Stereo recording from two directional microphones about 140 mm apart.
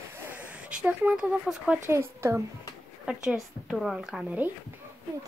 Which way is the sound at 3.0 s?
5° right (ahead or behind).